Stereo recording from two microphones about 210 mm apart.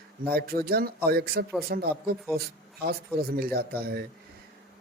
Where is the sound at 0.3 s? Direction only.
50° right (ahead or behind).